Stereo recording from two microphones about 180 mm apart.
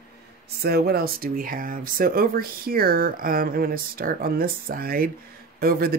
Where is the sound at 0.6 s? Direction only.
60° right (ahead or behind).